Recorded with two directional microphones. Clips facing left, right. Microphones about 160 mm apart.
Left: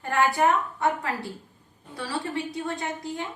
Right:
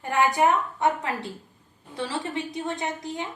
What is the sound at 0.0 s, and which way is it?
A woman's voice, 15° right (ahead or behind).